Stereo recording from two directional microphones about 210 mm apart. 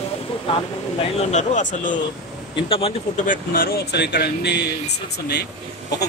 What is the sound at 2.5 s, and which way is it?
Speech, 25° left (ahead or behind).